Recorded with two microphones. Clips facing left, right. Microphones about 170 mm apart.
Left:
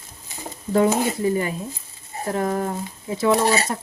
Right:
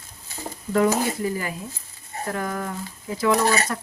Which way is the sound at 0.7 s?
25° left (ahead or behind).